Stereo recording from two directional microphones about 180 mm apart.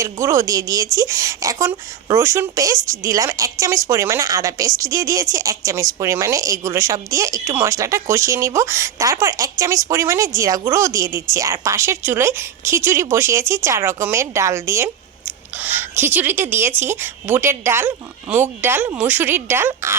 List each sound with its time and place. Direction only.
0.0 s a woman's voice: 15° right (ahead or behind)